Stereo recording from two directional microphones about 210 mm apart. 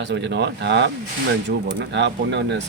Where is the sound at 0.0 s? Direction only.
55° right (ahead or behind).